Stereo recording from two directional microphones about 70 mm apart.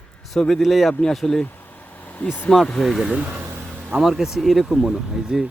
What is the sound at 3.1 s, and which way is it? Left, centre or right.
Speech, centre.